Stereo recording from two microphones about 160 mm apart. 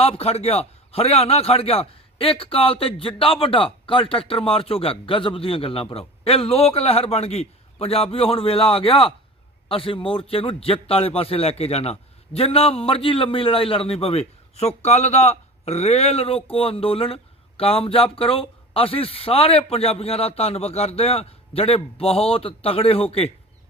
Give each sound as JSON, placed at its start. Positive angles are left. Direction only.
{"t": 0.0, "sound": "a man's voice", "side_deg": 40}